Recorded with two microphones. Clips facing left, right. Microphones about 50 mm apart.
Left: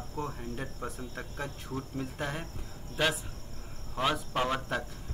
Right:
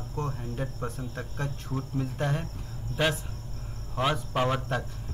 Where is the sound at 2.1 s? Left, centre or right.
Centre.